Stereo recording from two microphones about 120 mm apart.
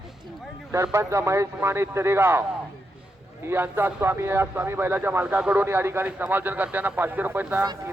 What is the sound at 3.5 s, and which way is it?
Speech, 20° right (ahead or behind).